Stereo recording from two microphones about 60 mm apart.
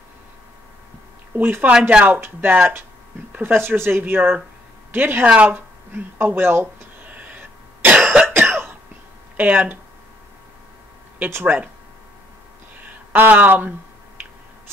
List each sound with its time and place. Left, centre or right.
1.3 s speech: right
1.7 s speech: centre
2.0 s speech: right
5.2 s speech: right
6.1 s speech: right
7.2 s throat clearing: right
8.4 s cough: right
9.4 s speech: right
11.4 s speech: right
13.1 s speech: right